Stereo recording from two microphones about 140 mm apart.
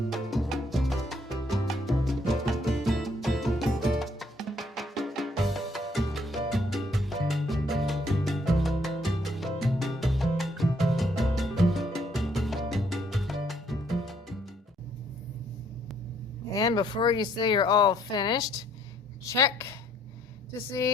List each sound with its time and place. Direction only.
0.1 s music: centre (ahead or behind)
16.5 s a woman's voice: 25° left (ahead or behind)